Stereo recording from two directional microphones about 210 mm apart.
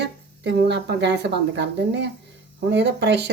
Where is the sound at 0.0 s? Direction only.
55° right (ahead or behind).